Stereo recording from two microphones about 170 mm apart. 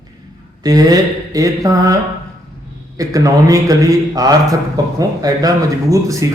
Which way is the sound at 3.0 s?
20° right (ahead or behind).